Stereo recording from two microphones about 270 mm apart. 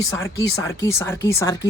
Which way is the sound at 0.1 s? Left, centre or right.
Centre.